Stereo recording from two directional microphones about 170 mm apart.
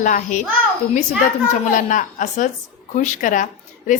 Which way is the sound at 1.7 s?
50° left (ahead or behind).